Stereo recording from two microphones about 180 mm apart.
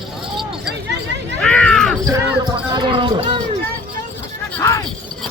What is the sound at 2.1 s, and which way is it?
Speech, 25° right (ahead or behind).